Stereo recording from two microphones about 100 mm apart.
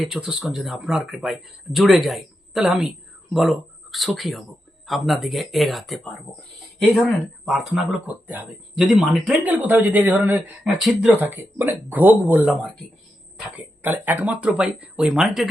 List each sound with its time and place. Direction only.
0.0 s speech: 5° right (ahead or behind)
7.8 s speech: 10° right (ahead or behind)
8.9 s speech: centre (ahead or behind)
9.4 s speech: 15° right (ahead or behind)
10.6 s speech: centre (ahead or behind)
11.2 s speech: 20° right (ahead or behind); by 15.4 s 5° right (ahead or behind)